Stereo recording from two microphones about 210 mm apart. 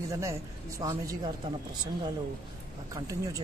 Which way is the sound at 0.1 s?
15° right (ahead or behind).